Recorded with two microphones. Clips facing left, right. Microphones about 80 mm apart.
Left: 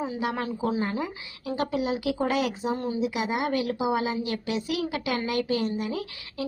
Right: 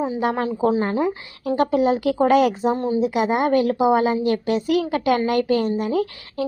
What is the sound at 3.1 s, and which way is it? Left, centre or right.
Speech, right.